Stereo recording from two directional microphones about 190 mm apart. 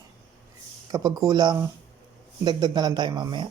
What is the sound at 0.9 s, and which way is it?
A man's voice, 15° right (ahead or behind).